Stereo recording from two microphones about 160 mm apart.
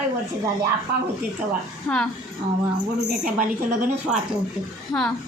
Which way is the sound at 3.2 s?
60° right (ahead or behind).